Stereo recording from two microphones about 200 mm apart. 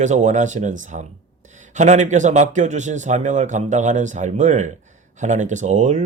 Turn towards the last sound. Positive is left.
turn(degrees=-35)  # may be behind; listen again after turning